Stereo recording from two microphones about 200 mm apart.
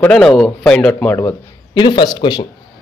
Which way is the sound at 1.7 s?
20° left (ahead or behind).